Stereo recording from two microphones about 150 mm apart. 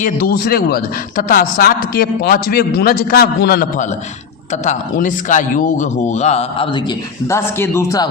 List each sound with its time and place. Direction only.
0.0 s a man's voice: 85° left
4.6 s a man's voice: 60° left (ahead or behind)
7.3 s a man's voice: 15° left (ahead or behind)